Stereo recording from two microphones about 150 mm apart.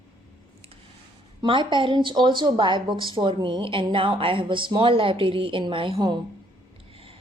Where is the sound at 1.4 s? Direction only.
35° right (ahead or behind).